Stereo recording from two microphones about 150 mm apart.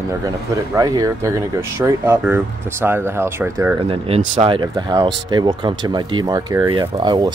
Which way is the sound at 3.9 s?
40° right (ahead or behind).